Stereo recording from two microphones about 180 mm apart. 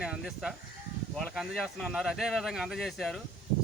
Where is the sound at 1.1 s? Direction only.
Centre (ahead or behind).